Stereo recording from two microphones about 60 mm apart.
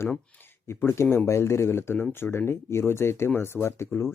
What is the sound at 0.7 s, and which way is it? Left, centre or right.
Speech, left.